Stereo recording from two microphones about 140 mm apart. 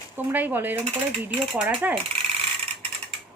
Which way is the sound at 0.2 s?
15° right (ahead or behind).